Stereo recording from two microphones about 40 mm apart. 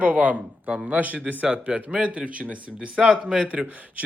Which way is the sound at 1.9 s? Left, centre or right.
Right.